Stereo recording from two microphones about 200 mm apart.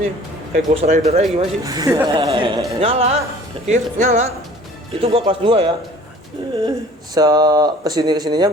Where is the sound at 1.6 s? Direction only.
15° right (ahead or behind).